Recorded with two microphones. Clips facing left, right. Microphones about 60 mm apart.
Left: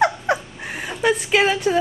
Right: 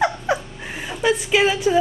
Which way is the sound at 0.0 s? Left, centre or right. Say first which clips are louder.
Left 2 dB; centre.